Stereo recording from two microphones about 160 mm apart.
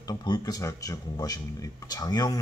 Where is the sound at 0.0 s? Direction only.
25° left (ahead or behind).